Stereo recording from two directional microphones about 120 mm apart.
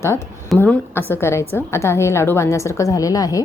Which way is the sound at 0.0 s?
20° left (ahead or behind).